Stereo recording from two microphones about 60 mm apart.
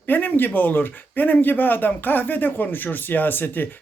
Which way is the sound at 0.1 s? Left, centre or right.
Left.